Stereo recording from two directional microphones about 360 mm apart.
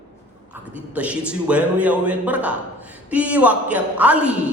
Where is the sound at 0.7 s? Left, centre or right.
Centre.